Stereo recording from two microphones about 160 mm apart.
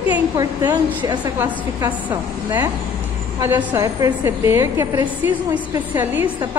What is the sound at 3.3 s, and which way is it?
A woman's voice, 15° right (ahead or behind).